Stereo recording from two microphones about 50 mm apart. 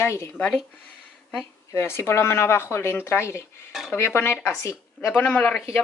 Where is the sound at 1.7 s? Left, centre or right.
Left.